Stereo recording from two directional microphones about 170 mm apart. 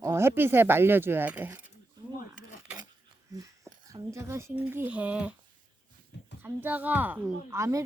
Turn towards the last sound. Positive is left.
turn(degrees=-15)  # may be behind; listen again after turning